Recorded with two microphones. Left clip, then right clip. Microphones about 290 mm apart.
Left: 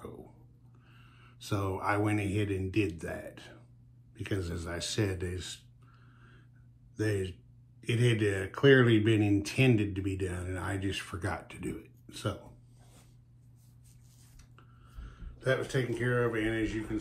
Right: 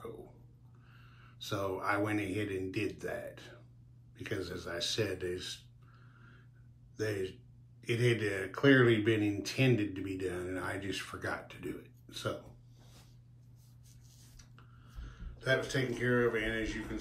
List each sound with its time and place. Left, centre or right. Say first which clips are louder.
0.9 s speech: right 2 dB; left
7.0 s speech: left 3 dB; left
15.0 s speech: even; left